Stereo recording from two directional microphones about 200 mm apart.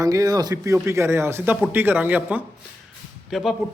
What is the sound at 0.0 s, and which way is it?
Speech, 15° right (ahead or behind).